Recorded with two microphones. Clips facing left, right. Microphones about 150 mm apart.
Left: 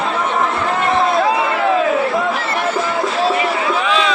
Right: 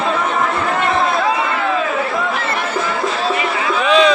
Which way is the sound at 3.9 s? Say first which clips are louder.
Right 9 dB; 20° right (ahead or behind).